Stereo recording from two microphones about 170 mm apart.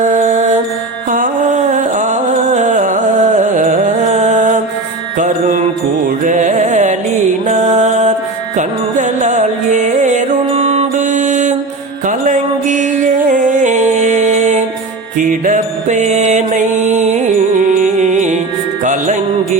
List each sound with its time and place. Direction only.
0.0 s mantra: 45° right (ahead or behind)
1.1 s music: 50° right (ahead or behind)
5.1 s mantra: 45° right (ahead or behind)
6.2 s music: 45° right (ahead or behind)